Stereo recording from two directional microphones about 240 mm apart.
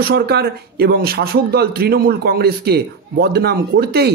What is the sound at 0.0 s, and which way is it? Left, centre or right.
Speech, right.